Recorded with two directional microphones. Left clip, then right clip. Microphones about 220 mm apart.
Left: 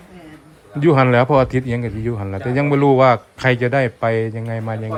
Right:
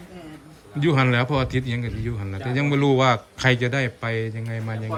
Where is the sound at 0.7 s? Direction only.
5° left (ahead or behind).